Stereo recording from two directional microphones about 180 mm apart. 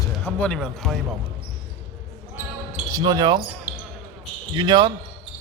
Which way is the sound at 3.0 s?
20° right (ahead or behind).